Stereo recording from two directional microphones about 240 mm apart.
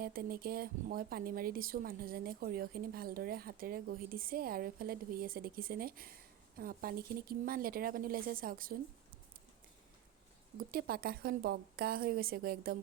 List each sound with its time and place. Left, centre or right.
0.0 s a woman's voice: right
10.7 s a woman's voice: right